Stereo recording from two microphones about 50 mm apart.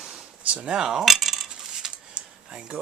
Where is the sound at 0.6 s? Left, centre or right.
Centre.